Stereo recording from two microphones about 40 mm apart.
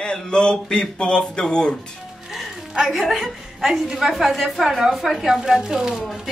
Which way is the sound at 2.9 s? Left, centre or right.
Centre.